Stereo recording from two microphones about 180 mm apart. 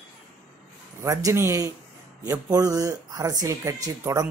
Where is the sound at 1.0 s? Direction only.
15° right (ahead or behind).